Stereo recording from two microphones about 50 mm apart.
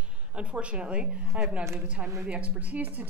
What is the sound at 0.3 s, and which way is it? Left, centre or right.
A woman's voice, right.